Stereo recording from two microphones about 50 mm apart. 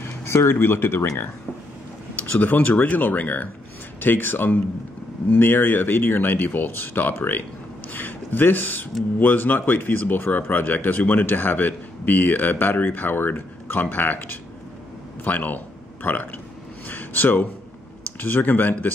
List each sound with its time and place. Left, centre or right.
0.2 s speech: left
2.4 s a man's voice: left
16.8 s a sound: left
18.2 s a man's voice: left